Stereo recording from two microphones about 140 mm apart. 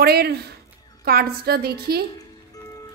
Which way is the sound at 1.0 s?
90° right.